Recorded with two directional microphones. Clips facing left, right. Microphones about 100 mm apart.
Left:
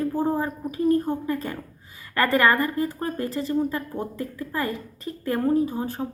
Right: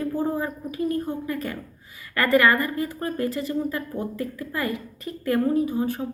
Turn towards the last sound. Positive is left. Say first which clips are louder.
# even
turn(degrees=30)  # may be behind; listen again after turning